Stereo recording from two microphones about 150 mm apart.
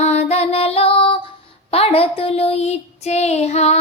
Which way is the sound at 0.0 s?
45° left (ahead or behind).